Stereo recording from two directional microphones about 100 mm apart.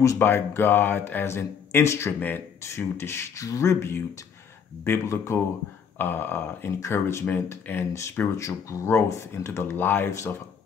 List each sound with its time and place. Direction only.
0.0 s speech: 25° left (ahead or behind)
5.9 s speech: 20° left (ahead or behind)